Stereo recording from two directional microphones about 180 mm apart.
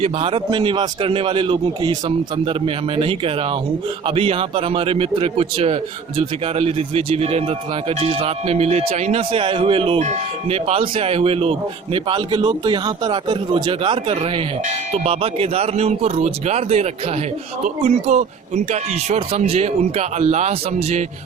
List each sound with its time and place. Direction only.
0.0 s a man's voice: 30° right (ahead or behind)